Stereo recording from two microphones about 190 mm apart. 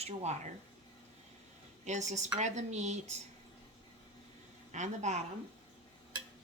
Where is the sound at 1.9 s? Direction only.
40° right (ahead or behind).